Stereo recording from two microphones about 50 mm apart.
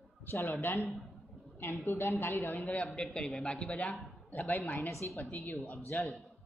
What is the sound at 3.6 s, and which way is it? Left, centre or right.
Speech, centre.